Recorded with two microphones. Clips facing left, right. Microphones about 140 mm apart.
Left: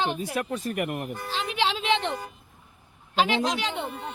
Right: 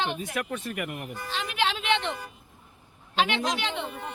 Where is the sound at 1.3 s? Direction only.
30° left (ahead or behind).